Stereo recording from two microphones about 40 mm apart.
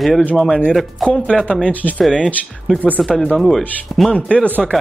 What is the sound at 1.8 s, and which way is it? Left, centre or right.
Speech, left.